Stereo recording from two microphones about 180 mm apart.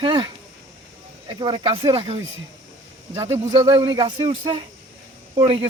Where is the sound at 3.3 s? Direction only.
15° right (ahead or behind).